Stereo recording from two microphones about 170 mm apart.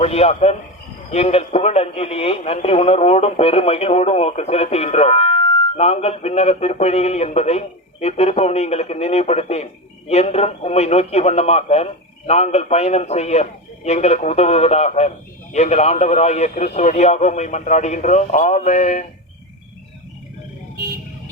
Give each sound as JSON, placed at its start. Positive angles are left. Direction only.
{"t": 0.0, "sound": "a man's voice", "side_deg": 40}